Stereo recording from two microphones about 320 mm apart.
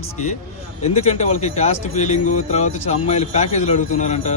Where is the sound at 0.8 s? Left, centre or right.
Centre.